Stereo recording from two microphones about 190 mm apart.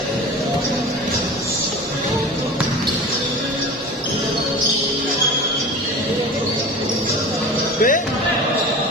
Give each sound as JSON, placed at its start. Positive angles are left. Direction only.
{"t": 7.8, "sound": "music", "side_deg": 45}